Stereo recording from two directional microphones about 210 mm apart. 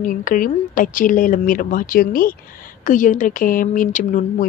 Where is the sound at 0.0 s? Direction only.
40° left (ahead or behind).